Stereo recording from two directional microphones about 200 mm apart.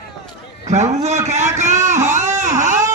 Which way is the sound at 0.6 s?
35° right (ahead or behind).